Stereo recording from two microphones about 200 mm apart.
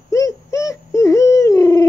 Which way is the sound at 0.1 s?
15° left (ahead or behind).